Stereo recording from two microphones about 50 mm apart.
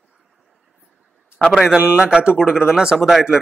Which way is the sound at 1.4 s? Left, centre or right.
Centre.